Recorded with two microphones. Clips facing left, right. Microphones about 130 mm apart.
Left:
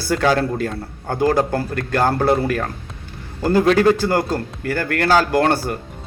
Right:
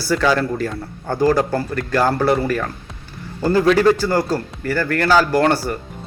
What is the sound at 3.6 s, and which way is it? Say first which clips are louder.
Speech: right 1 dB; 45° left (ahead or behind).